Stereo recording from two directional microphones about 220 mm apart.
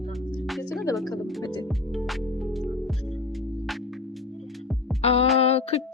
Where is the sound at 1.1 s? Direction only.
15° left (ahead or behind).